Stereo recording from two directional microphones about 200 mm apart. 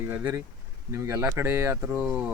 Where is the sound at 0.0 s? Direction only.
10° right (ahead or behind).